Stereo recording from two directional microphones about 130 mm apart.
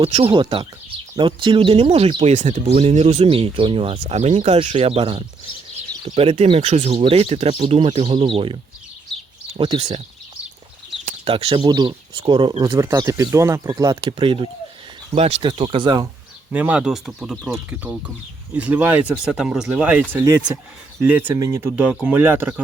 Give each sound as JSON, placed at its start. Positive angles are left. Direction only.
{"t": 0.0, "sound": "speech", "side_deg": -45}
{"t": 2.3, "sound": "speech", "side_deg": -65}
{"t": 3.9, "sound": "speech", "side_deg": -60}
{"t": 9.6, "sound": "speech", "side_deg": -40}
{"t": 11.3, "sound": "speech", "side_deg": -45}
{"t": 11.6, "sound": "speech", "side_deg": -30}
{"t": 12.6, "sound": "speech", "side_deg": -25}
{"t": 14.0, "sound": "speech", "side_deg": -45}
{"t": 16.5, "sound": "speech", "side_deg": -10}
{"t": 20.2, "sound": "speech", "side_deg": -25}
{"t": 21.0, "sound": "speech", "side_deg": -15}